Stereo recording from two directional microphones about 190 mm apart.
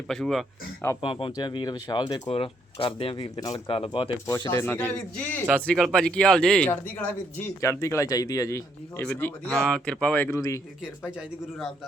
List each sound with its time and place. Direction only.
0.1 s speech: centre (ahead or behind)
1.0 s speech: 25° left (ahead or behind)
11.2 s speech: centre (ahead or behind)